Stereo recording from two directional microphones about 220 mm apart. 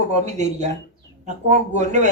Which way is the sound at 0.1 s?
30° right (ahead or behind).